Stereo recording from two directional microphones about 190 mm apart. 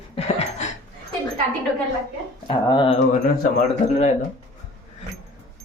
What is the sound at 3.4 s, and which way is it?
Speech, 40° left (ahead or behind).